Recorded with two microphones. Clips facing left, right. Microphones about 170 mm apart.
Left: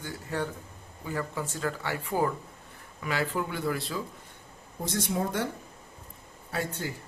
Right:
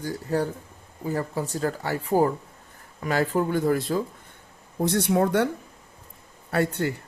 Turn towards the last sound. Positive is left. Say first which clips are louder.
# right 9 dB
turn(degrees=-65)  # may be behind; listen again after turning